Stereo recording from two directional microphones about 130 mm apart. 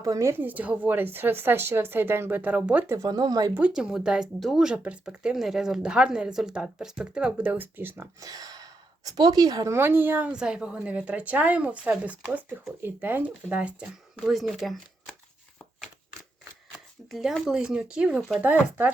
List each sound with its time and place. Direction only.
0.0 s speech: 25° right (ahead or behind)
3.8 s speech: 5° right (ahead or behind)
17.1 s speech: centre (ahead or behind)